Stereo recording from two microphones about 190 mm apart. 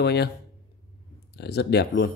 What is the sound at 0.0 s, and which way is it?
Speech, 60° left (ahead or behind).